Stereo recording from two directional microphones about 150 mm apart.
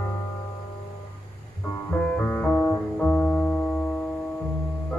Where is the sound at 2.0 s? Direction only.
15° left (ahead or behind).